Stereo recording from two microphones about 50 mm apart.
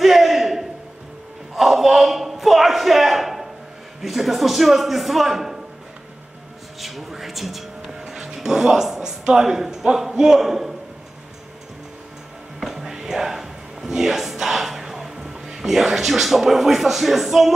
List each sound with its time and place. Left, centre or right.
0.0 s a sound: centre
4.0 s a man's voice: centre
6.8 s a man's voice: centre
12.5 s music: centre